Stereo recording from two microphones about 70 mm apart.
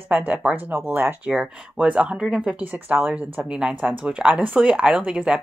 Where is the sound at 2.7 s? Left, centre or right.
Right.